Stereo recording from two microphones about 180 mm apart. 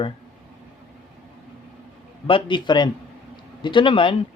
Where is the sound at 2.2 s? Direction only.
25° left (ahead or behind).